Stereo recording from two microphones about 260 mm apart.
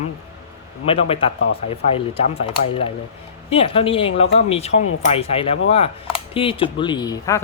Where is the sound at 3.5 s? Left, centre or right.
Left.